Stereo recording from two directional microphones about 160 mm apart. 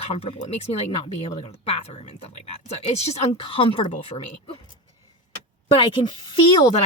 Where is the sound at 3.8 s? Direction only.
45° left (ahead or behind).